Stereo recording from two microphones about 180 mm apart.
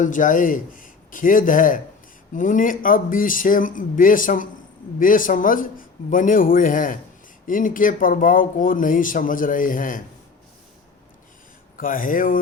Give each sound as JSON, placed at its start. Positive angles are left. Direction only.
{"t": 0.0, "sound": "speech", "side_deg": 45}
{"t": 11.8, "sound": "speech", "side_deg": 50}